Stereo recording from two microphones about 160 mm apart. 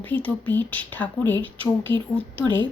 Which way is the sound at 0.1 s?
10° left (ahead or behind).